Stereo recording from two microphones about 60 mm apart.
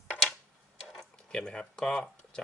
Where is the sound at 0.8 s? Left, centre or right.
Centre.